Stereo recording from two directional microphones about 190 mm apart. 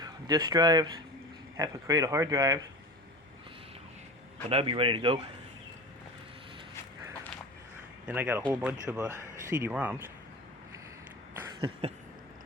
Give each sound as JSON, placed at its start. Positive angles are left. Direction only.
{"t": 0.0, "sound": "speech", "side_deg": -20}
{"t": 4.4, "sound": "speech", "side_deg": -30}
{"t": 8.0, "sound": "speech", "side_deg": -10}
{"t": 11.6, "sound": "a sound", "side_deg": -30}